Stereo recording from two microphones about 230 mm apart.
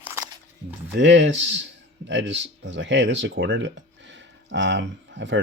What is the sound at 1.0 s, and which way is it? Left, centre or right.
Speech, right.